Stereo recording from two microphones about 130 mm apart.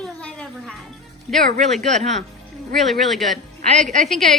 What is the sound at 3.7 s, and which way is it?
Speech, 70° right (ahead or behind).